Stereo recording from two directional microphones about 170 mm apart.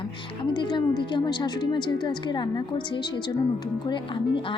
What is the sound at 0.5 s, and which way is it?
A woman's voice, 25° left (ahead or behind).